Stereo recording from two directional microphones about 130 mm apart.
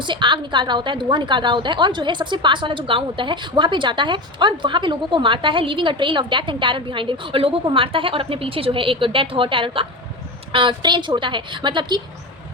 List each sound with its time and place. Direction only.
0.0 s a woman's voice: 40° right (ahead or behind)